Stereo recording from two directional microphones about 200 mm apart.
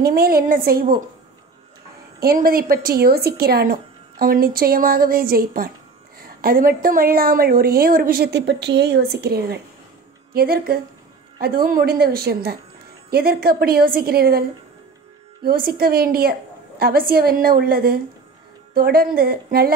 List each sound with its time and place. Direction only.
0.0 s a woman's voice: 50° right (ahead or behind)
2.1 s a woman's voice: 45° right (ahead or behind)
15.4 s a woman's voice: 50° right (ahead or behind)